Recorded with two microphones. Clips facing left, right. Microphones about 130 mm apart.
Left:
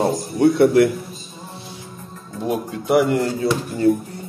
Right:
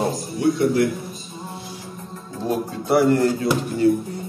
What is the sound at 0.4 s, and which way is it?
Speech, 65° left (ahead or behind).